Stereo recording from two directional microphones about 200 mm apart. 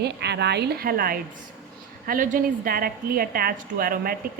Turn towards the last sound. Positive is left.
turn(degrees=-45)  # may be behind; listen again after turning